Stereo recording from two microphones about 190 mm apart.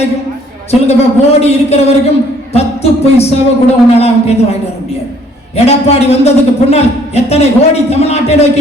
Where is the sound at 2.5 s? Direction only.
35° left (ahead or behind).